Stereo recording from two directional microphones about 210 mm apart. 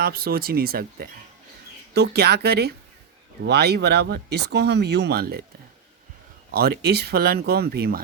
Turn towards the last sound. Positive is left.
turn(degrees=-45)  # may be behind; listen again after turning